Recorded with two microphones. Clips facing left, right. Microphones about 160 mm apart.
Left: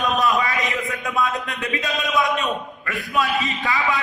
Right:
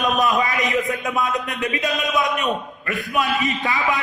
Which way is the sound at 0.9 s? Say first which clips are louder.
Right 1 dB; 20° right (ahead or behind).